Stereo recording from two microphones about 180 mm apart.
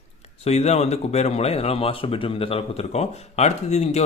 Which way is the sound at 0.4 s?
35° left (ahead or behind).